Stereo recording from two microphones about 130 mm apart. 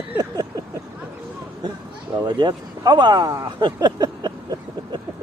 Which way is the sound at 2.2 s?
35° right (ahead or behind).